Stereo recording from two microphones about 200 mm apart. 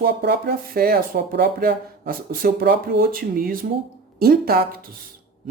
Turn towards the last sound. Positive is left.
turn(degrees=-50)  # may be behind; listen again after turning